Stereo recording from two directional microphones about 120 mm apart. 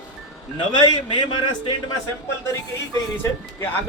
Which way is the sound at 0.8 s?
40° left (ahead or behind).